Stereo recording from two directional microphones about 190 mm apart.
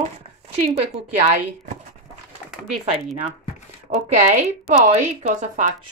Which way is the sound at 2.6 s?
5° right (ahead or behind).